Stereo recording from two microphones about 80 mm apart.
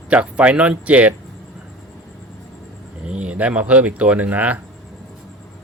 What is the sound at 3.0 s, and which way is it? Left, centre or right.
Speech, centre.